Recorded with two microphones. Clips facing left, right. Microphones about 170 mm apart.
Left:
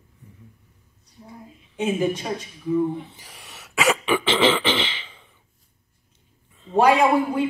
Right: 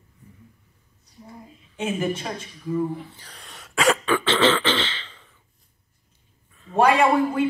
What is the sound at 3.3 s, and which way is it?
Throat clearing, 5° left (ahead or behind).